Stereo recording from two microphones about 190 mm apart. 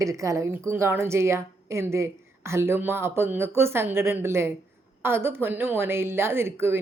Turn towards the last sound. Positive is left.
turn(degrees=-10)  # may be behind; listen again after turning